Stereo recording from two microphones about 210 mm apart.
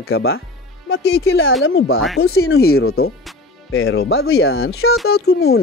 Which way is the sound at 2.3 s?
85° left.